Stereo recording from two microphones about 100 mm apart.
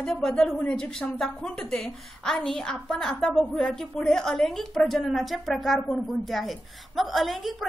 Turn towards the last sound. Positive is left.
turn(degrees=0)  # may be behind; listen again after turning